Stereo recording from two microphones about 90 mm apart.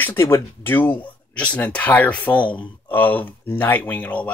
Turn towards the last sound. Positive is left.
turn(degrees=15)  # may be behind; listen again after turning